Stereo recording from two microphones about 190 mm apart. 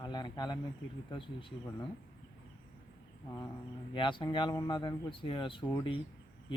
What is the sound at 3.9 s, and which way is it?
Speech, 25° left (ahead or behind).